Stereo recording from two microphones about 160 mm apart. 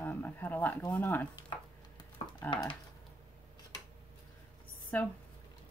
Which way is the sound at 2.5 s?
30° left (ahead or behind).